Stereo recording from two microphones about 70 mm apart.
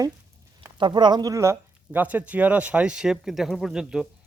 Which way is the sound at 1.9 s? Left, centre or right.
Right.